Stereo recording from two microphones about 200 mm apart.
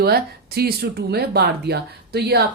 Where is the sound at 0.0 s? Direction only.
50° right (ahead or behind).